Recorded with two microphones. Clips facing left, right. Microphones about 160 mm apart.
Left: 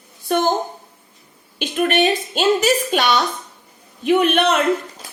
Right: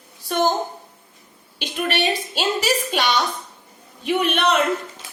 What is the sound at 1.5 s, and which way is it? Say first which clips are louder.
A woman's voice: left 6 dB; 50° left (ahead or behind).